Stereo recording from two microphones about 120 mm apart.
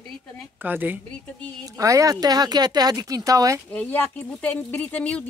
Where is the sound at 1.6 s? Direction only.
30° right (ahead or behind).